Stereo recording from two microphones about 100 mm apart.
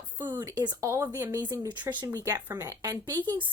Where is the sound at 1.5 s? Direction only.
45° right (ahead or behind).